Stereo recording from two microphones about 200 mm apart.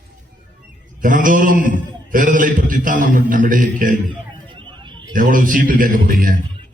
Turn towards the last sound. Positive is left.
turn(degrees=-45)  # may be behind; listen again after turning